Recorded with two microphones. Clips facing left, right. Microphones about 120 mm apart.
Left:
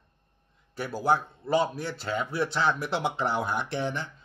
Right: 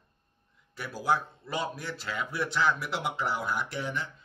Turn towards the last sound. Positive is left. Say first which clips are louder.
# left 3 dB
turn(degrees=25)  # may be behind; listen again after turning